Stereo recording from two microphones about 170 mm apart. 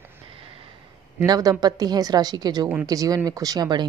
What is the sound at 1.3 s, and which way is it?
A woman's voice, 20° right (ahead or behind).